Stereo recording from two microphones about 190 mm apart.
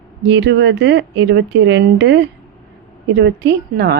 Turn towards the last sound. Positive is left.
turn(degrees=-60)  # may be behind; listen again after turning